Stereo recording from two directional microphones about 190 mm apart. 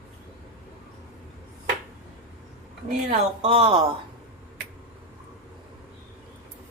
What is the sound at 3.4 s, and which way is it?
Speech, 30° right (ahead or behind).